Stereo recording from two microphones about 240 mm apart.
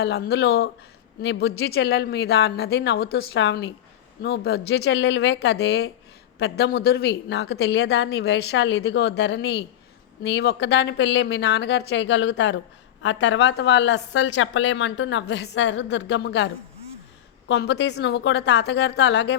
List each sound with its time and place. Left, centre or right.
0.0 s a woman's voice: left
17.5 s a woman's voice: left